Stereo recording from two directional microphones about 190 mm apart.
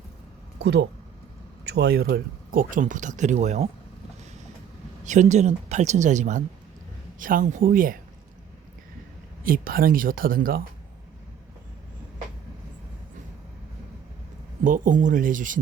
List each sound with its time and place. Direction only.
0.6 s speech: 65° right (ahead or behind); by 3.7 s 35° right (ahead or behind)
5.0 s speech: 40° right (ahead or behind)
9.4 s speech: 50° right (ahead or behind)
14.6 s speech: 45° right (ahead or behind)